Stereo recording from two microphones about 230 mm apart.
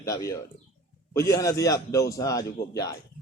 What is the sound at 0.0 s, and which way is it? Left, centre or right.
A man's voice, centre.